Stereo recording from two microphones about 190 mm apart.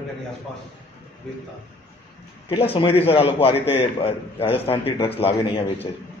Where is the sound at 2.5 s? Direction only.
30° left (ahead or behind).